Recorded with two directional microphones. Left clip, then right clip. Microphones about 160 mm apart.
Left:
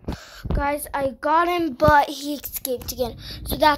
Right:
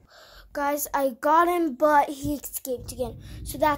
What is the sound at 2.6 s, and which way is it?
A child's voice, 5° left (ahead or behind).